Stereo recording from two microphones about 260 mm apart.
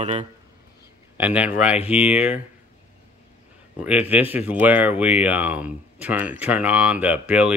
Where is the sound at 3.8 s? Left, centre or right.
Centre.